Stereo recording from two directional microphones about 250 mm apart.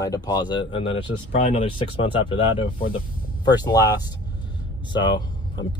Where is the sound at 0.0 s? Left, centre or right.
Centre.